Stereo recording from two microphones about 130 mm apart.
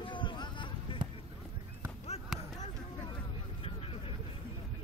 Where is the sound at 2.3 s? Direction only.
Centre (ahead or behind).